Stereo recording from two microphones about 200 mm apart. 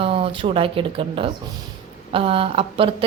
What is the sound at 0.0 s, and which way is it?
A woman's voice, 25° right (ahead or behind).